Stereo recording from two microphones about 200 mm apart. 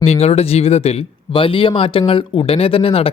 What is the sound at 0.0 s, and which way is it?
Speech, 30° left (ahead or behind).